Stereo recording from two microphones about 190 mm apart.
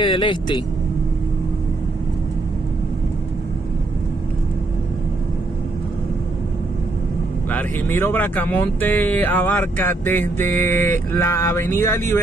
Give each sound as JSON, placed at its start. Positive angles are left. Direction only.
{"t": 0.0, "sound": "speech", "side_deg": 25}
{"t": 7.4, "sound": "speech", "side_deg": 10}